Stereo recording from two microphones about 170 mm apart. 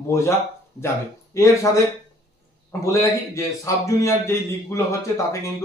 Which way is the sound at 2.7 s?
15° left (ahead or behind).